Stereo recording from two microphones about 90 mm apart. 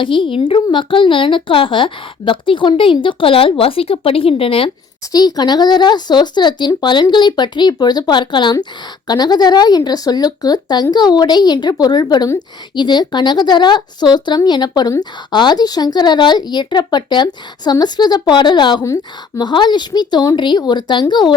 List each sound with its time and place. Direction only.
0.0 s a woman's voice: 75° left (ahead or behind); by 4.7 s 90° left
5.1 s speech: 50° left (ahead or behind)
14.7 s speech: 40° left (ahead or behind)